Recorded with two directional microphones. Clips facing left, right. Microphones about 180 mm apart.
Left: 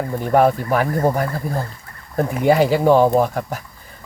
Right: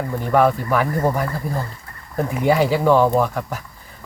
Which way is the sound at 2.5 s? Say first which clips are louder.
Left 2 dB; 45° left (ahead or behind).